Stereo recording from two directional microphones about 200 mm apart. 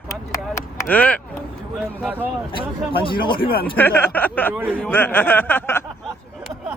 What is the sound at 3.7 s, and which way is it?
Speech, 10° left (ahead or behind).